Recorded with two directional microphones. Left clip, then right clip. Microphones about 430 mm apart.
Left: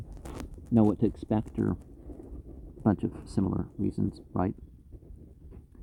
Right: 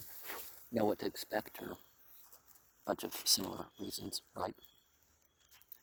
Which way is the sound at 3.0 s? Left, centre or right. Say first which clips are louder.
Left 1 dB; centre.